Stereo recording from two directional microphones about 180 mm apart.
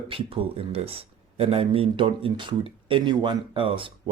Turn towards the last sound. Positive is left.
turn(degrees=-30)  # may be behind; listen again after turning